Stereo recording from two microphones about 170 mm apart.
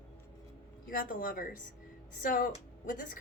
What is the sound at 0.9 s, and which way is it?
Speech, 55° left (ahead or behind).